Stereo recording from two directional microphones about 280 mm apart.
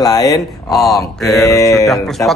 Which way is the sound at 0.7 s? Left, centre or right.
Centre.